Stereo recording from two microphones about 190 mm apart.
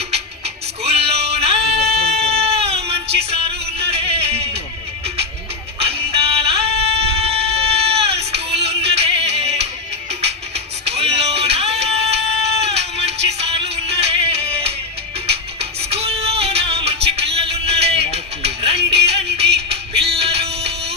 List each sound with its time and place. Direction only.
0.1 s music: 30° right (ahead or behind)
5.8 s a sound: 30° right (ahead or behind)
10.1 s music: 35° right (ahead or behind)